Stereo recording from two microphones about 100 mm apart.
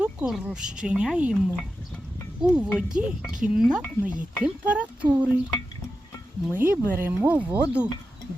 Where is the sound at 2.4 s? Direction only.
10° right (ahead or behind).